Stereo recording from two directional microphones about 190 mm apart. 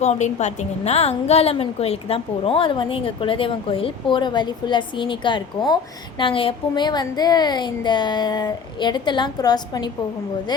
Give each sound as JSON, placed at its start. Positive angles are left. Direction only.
{"t": 0.0, "sound": "a woman's voice", "side_deg": 35}